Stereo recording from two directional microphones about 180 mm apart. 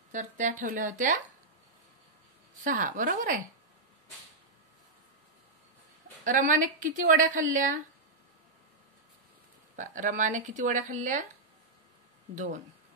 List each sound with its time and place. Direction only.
0.1 s a woman's voice: 45° right (ahead or behind)
2.6 s a woman's voice: 45° right (ahead or behind)
6.2 s a woman's voice: 45° right (ahead or behind)
9.8 s a woman's voice: 45° right (ahead or behind)